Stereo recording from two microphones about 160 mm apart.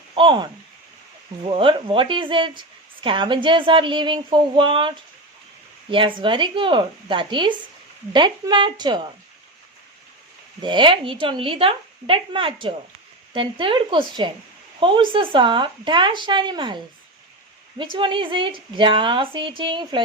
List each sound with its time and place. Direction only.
0.1 s speech: 30° right (ahead or behind)
1.5 s a woman's voice: 35° right (ahead or behind)
10.6 s speech: 30° right (ahead or behind)
17.9 s speech: 30° right (ahead or behind)